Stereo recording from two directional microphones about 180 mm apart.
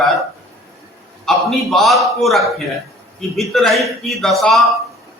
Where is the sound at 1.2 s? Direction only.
Centre (ahead or behind).